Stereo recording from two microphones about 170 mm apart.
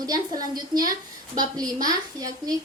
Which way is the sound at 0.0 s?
20° right (ahead or behind).